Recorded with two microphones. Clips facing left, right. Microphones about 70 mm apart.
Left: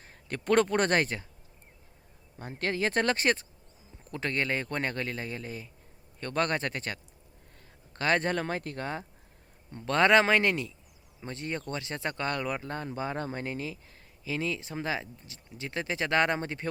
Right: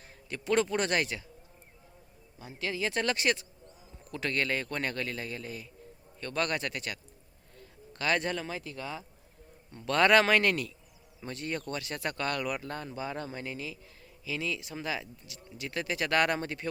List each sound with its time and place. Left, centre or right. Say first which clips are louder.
0.3 s speech: left 3 dB; left
2.4 s speech: left 3 dB; left
9.7 s speech: left 1 dB; left